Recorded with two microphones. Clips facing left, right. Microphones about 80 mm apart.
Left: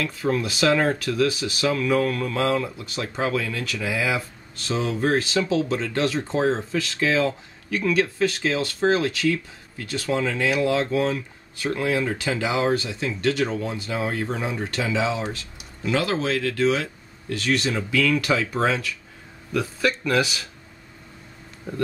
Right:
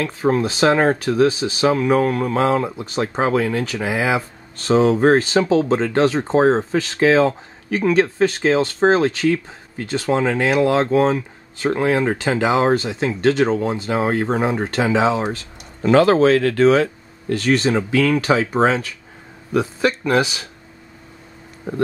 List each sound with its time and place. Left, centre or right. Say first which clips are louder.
0.0 s speech: right 6 dB; right
21.7 s speech: right 5 dB; right